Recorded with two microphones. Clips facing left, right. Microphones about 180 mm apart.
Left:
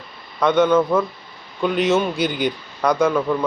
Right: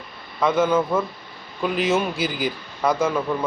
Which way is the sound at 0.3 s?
5° right (ahead or behind).